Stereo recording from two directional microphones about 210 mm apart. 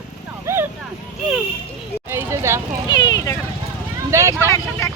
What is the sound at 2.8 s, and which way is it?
Speech, 20° left (ahead or behind).